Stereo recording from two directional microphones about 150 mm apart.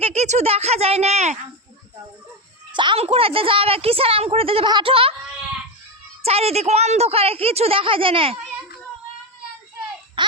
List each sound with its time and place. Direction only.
0.0 s speech: 45° right (ahead or behind)
2.7 s a woman's voice: 35° right (ahead or behind)
6.2 s a woman's voice: 40° right (ahead or behind)
10.2 s a sound: 30° right (ahead or behind)